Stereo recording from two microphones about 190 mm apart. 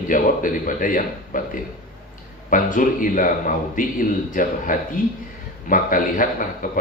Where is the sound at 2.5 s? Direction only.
45° left (ahead or behind).